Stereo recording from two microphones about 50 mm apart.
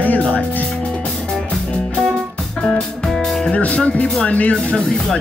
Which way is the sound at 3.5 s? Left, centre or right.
Left.